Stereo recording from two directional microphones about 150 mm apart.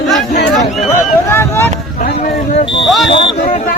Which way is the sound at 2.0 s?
50° left (ahead or behind).